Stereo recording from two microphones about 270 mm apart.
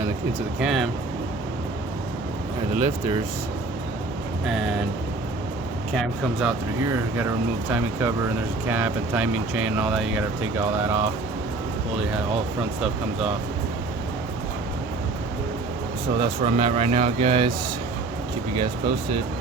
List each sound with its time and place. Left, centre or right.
0.6 s speech: centre
4.4 s speech: centre
5.9 s speech: centre
16.2 s speech: right